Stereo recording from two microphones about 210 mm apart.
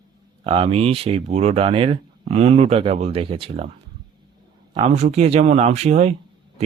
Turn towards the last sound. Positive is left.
turn(degrees=-30)  # may be behind; listen again after turning